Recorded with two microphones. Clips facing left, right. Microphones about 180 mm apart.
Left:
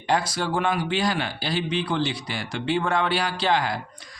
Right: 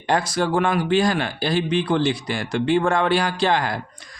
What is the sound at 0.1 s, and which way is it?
Speech, 50° right (ahead or behind).